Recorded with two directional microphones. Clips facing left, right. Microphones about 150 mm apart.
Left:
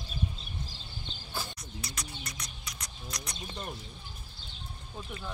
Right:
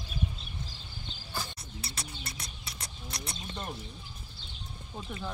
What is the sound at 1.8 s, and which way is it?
Bird, 30° right (ahead or behind).